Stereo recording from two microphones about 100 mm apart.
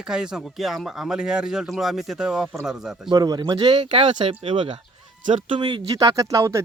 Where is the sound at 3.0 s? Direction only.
40° right (ahead or behind); by 4.8 s 60° right (ahead or behind).